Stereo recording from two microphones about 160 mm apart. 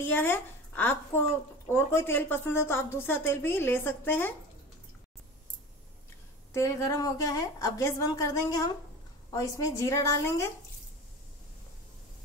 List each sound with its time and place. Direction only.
0.0 s a woman's voice: 15° left (ahead or behind)
6.5 s a woman's voice: 15° left (ahead or behind)